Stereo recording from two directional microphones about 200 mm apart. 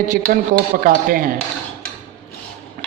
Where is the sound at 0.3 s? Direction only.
45° right (ahead or behind).